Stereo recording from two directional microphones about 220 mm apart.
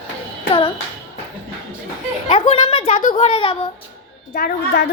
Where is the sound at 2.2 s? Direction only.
25° left (ahead or behind).